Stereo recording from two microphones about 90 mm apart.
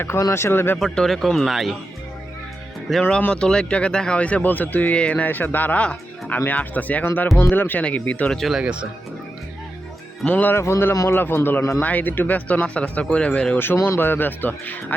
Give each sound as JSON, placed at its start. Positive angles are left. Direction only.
{"t": 0.2, "sound": "speech", "side_deg": 35}
{"t": 0.8, "sound": "a man's voice", "side_deg": 5}
{"t": 3.0, "sound": "speech", "side_deg": 15}
{"t": 8.4, "sound": "a man's voice", "side_deg": 0}
{"t": 10.2, "sound": "speech", "side_deg": 20}
{"t": 13.7, "sound": "speech", "side_deg": 30}